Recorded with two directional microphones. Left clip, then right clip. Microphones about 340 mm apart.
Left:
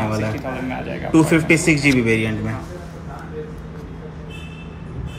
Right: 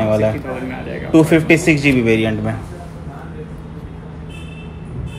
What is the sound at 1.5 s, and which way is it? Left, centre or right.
Speech, right.